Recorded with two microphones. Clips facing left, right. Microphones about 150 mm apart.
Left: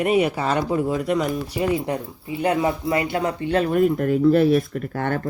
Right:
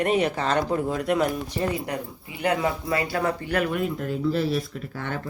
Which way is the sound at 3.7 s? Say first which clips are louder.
Left 8 dB; 50° left (ahead or behind).